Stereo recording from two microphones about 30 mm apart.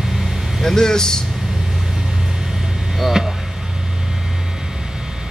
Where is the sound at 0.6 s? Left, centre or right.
Centre.